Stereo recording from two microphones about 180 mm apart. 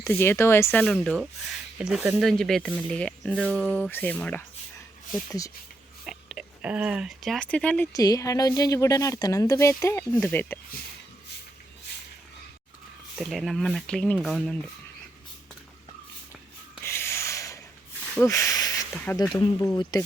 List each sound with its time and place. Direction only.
0.0 s speech: 15° left (ahead or behind)
6.1 s speech: 5° right (ahead or behind)
7.9 s speech: 20° left (ahead or behind)
13.1 s speech: centre (ahead or behind)
16.8 s a sound: 15° left (ahead or behind)
18.2 s speech: 15° left (ahead or behind)